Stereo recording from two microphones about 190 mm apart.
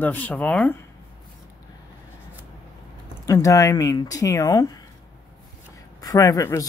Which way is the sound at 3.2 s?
15° left (ahead or behind).